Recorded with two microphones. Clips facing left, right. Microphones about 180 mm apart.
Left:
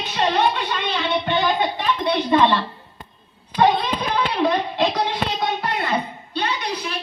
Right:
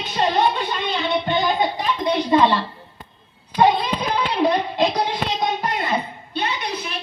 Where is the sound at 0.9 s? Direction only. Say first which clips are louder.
Right 1 dB; 15° right (ahead or behind).